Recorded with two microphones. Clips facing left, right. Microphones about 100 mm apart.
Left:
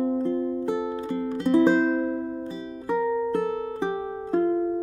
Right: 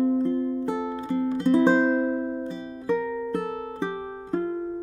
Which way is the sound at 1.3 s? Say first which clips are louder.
Left 1 dB; 20° right (ahead or behind).